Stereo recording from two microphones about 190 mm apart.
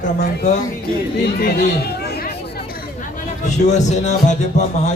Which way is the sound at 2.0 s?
55° left (ahead or behind).